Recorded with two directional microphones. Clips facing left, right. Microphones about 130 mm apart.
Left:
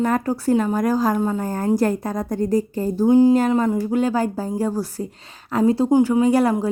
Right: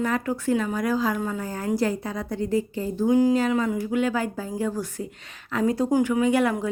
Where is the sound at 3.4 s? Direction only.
45° left (ahead or behind).